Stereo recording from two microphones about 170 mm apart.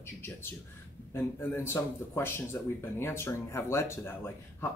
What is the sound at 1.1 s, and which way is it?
Speech, 15° left (ahead or behind).